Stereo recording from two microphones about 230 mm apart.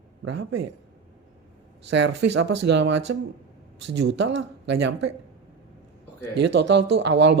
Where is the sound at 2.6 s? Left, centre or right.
Right.